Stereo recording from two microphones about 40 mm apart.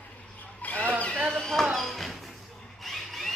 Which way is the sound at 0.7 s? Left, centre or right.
Left.